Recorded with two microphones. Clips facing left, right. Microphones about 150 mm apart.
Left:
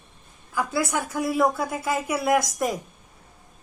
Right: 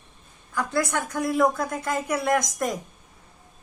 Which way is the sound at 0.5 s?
5° left (ahead or behind).